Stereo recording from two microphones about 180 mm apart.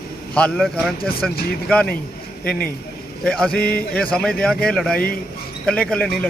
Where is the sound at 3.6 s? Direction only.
55° left (ahead or behind).